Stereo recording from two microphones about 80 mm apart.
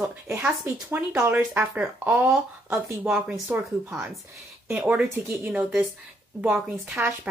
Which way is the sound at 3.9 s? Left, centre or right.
Centre.